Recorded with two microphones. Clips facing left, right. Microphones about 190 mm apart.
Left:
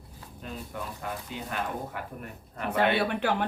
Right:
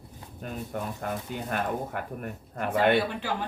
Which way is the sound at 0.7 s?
50° right (ahead or behind).